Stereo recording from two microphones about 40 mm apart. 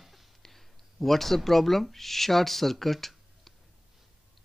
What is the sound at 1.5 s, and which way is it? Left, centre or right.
Speech, centre.